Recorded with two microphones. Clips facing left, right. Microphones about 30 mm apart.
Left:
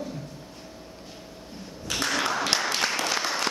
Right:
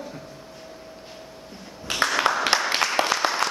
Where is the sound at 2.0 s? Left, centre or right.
Right.